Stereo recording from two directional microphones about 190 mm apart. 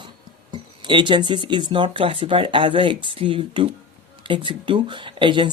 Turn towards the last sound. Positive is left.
turn(degrees=-25)  # may be behind; listen again after turning